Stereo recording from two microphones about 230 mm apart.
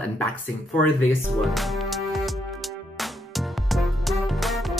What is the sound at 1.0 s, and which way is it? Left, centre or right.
Music, centre.